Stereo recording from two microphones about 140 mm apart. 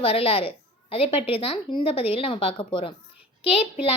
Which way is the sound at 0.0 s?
40° left (ahead or behind).